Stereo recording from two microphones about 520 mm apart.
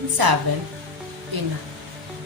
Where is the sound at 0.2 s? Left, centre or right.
Right.